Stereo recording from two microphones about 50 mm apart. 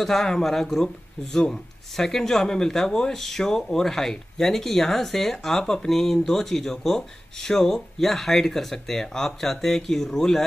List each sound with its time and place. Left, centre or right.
0.0 s speech: centre